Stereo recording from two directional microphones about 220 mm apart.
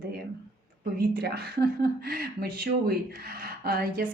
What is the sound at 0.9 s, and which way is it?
A woman's voice, 45° right (ahead or behind).